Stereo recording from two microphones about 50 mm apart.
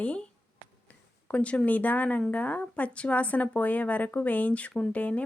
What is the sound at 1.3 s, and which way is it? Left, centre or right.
A woman's voice, left.